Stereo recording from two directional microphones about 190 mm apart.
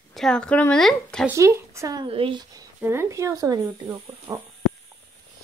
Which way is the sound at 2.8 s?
15° right (ahead or behind).